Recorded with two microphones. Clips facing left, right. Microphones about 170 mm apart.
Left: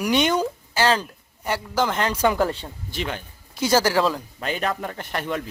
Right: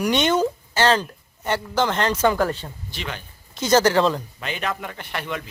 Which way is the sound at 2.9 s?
50° left (ahead or behind).